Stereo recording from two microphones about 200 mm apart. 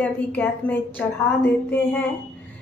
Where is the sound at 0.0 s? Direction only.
10° left (ahead or behind).